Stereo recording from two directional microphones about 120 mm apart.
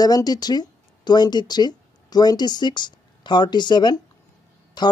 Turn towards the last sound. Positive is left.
turn(degrees=35)  # may be behind; listen again after turning